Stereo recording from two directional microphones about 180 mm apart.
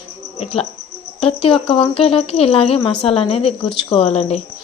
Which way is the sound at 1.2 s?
30° left (ahead or behind).